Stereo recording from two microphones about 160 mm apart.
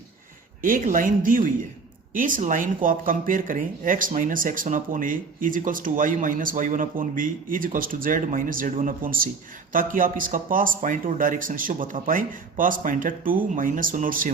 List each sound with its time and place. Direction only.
0.6 s speech: 55° right (ahead or behind)